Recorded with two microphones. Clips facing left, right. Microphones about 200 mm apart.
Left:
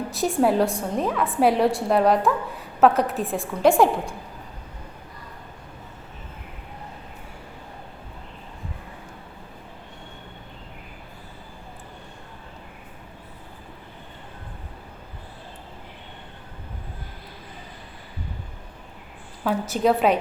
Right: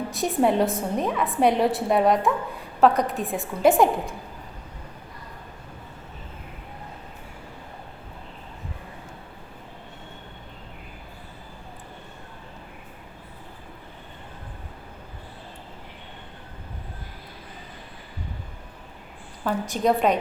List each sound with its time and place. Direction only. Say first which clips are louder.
0.1 s a woman's voice: left 1 dB; centre (ahead or behind)
19.5 s a woman's voice: left 2 dB; 5° left (ahead or behind)